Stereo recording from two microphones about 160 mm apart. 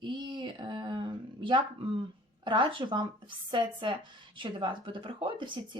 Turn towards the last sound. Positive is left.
turn(degrees=-30)  # may be behind; listen again after turning